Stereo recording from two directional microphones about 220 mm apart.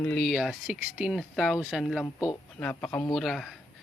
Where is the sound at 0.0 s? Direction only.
Centre (ahead or behind).